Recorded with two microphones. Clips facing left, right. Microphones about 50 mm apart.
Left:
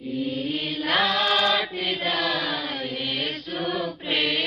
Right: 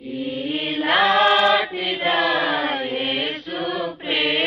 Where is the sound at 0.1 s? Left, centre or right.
Centre.